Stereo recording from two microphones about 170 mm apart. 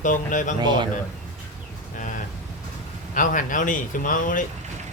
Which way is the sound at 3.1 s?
50° left (ahead or behind).